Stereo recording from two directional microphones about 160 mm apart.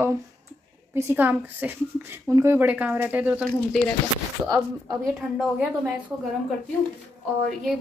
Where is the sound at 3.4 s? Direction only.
Centre (ahead or behind).